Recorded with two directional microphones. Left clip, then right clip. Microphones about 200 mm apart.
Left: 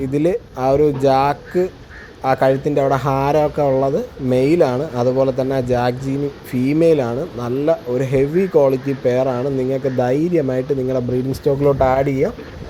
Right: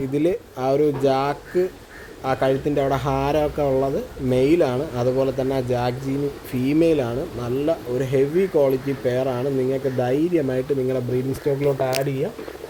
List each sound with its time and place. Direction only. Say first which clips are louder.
0.1 s speech: left 4 dB; 15° left (ahead or behind)